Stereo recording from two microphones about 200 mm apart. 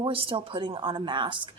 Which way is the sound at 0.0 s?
25° right (ahead or behind).